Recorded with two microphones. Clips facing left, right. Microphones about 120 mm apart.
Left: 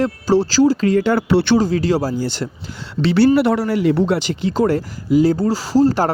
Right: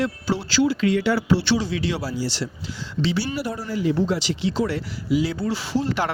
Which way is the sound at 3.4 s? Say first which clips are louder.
Left 11 dB; 75° left (ahead or behind).